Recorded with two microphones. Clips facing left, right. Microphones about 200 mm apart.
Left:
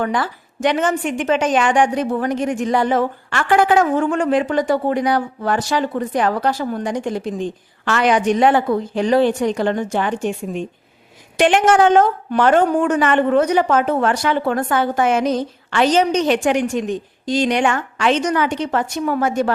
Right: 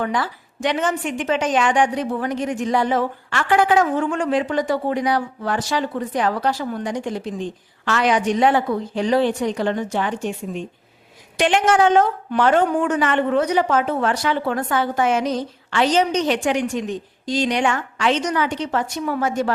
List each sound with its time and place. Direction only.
0.0 s a woman's voice: 50° left (ahead or behind)